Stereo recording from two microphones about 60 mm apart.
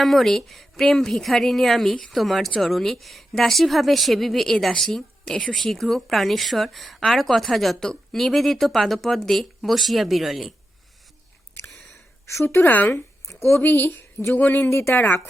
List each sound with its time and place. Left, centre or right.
0.0 s a woman's voice: centre
12.2 s speech: left
12.6 s speech: left
14.7 s speech: left
14.9 s speech: left